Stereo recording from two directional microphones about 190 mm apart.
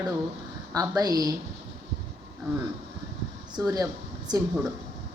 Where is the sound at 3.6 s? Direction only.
20° right (ahead or behind).